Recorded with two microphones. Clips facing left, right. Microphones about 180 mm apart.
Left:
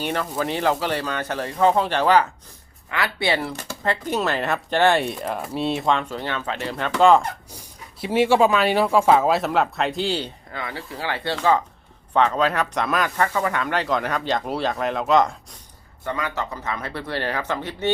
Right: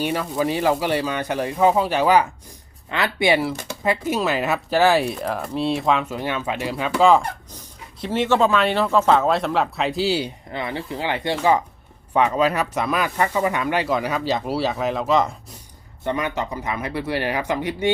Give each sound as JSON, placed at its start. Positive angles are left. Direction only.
{"t": 0.0, "sound": "speech", "side_deg": -10}
{"t": 3.4, "sound": "speech", "side_deg": -5}
{"t": 8.0, "sound": "speech", "side_deg": 10}
{"t": 10.5, "sound": "speech", "side_deg": -20}
{"t": 16.0, "sound": "speech", "side_deg": -20}